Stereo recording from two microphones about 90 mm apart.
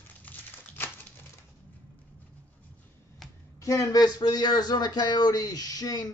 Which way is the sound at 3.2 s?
Centre (ahead or behind).